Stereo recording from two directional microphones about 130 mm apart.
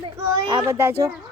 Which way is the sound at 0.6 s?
20° right (ahead or behind).